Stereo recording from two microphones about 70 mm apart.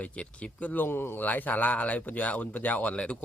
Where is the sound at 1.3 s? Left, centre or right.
Left.